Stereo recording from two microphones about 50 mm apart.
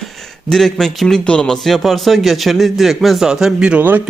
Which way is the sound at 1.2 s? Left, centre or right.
Centre.